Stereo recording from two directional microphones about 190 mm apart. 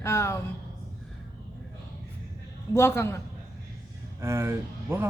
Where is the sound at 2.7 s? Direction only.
15° left (ahead or behind).